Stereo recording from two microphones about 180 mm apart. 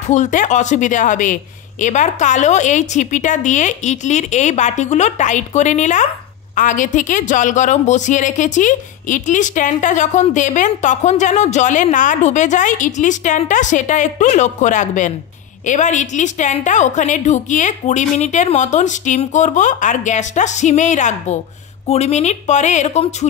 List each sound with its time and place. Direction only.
0.1 s a woman's voice: 45° left (ahead or behind)